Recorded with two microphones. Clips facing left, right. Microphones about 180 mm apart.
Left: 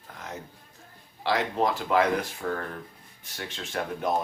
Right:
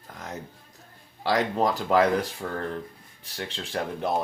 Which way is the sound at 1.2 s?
40° right (ahead or behind).